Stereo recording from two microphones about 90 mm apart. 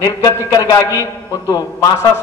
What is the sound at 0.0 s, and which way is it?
Speech, 40° left (ahead or behind).